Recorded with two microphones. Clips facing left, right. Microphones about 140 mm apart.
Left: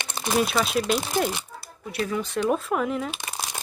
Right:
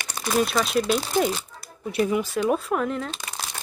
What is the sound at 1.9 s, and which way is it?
Speech, 20° right (ahead or behind).